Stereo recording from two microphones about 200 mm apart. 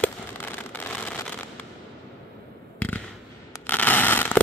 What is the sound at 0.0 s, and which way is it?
Fireworks, 10° left (ahead or behind).